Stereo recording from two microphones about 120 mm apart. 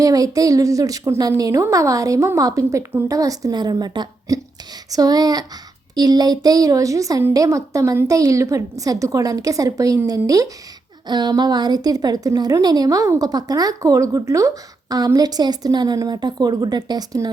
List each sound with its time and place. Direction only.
0.0 s a woman's voice: 30° right (ahead or behind)